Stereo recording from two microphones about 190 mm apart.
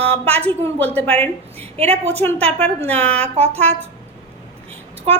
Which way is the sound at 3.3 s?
35° right (ahead or behind).